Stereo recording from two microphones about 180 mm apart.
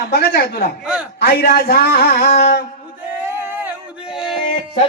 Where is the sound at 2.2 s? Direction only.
40° left (ahead or behind).